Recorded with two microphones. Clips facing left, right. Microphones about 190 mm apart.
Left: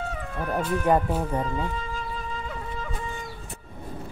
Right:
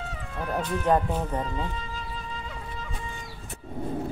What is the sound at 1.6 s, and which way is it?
Music, 50° left (ahead or behind).